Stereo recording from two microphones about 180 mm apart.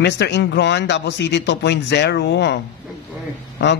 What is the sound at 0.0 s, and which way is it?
Mantra, 70° left (ahead or behind).